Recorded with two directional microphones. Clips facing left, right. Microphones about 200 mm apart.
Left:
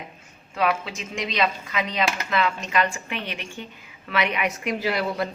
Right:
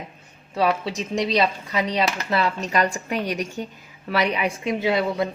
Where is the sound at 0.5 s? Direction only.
35° right (ahead or behind).